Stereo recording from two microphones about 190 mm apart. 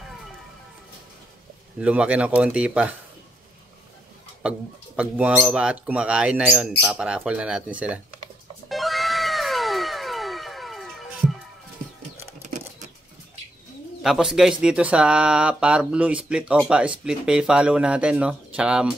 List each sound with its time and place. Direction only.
1.8 s speech: 5° right (ahead or behind)
4.4 s speech: 5° right (ahead or behind)
8.6 s cat: centre (ahead or behind)
12.4 s a sound: 40° right (ahead or behind)
14.0 s speech: 5° right (ahead or behind)